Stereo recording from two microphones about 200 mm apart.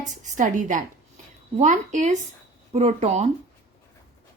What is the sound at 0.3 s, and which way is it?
Speech, 40° right (ahead or behind).